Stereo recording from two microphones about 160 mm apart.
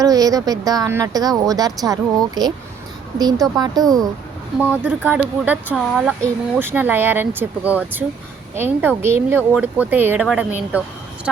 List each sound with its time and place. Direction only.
0.0 s speech: 20° right (ahead or behind)
4.6 s speech: 10° right (ahead or behind)